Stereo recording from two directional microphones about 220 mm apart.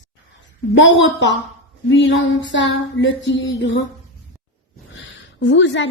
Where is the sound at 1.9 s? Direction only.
55° left (ahead or behind).